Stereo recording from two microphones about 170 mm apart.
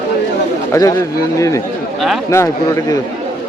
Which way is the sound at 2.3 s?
15° left (ahead or behind).